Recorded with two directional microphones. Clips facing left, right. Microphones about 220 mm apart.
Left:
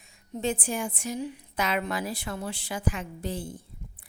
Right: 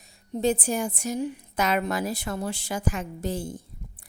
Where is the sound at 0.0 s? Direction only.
40° right (ahead or behind).